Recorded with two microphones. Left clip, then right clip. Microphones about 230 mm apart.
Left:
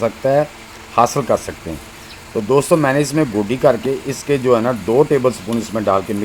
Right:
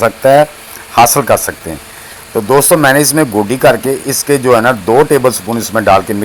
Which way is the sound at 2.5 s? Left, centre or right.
Centre.